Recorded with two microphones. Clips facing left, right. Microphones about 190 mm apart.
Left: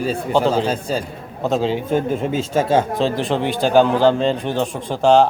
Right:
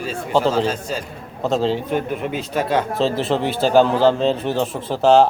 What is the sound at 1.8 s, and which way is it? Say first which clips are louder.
Speech: left 3 dB; 30° left (ahead or behind).